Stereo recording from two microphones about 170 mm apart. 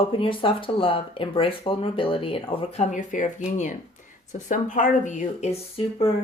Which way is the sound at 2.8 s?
45° left (ahead or behind).